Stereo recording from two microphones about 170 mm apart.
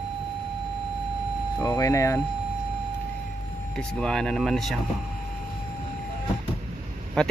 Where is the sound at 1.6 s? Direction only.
20° left (ahead or behind).